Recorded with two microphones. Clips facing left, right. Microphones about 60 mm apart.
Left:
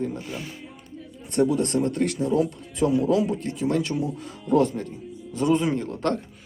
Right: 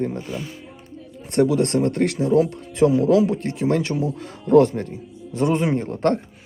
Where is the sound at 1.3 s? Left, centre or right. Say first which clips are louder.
Right 4 dB; right.